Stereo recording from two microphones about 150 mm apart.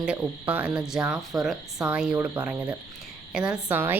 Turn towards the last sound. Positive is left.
turn(degrees=-15)  # may be behind; listen again after turning